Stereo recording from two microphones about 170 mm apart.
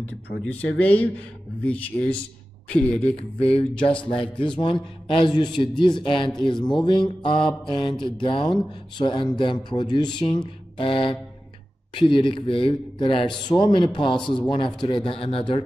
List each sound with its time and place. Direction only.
0.4 s speech: 10° left (ahead or behind)
3.2 s speech: 35° left (ahead or behind)